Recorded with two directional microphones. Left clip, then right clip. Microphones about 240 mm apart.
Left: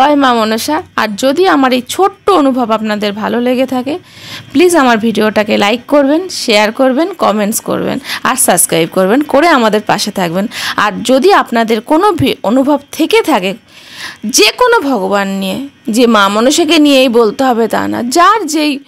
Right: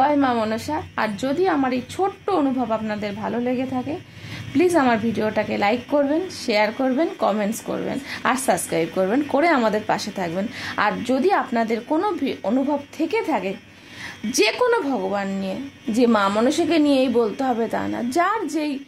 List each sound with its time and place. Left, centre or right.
0.0 s a woman's voice: left